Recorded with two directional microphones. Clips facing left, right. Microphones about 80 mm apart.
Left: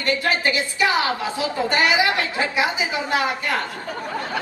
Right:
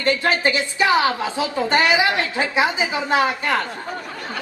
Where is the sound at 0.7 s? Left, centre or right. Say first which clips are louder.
Right 4 dB; right.